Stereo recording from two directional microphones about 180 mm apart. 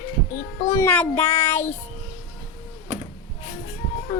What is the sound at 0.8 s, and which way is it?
Speech, 10° left (ahead or behind).